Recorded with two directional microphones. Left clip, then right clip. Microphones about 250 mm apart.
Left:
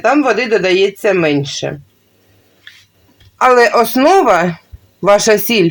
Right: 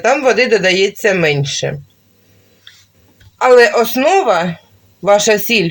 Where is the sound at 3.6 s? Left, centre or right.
Left.